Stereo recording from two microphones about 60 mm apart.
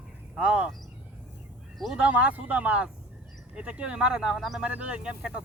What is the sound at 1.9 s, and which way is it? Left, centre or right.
Speech, right.